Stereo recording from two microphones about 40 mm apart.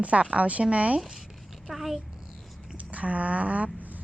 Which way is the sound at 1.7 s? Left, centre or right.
Centre.